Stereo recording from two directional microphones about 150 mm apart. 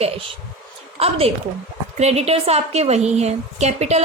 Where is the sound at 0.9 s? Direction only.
40° right (ahead or behind).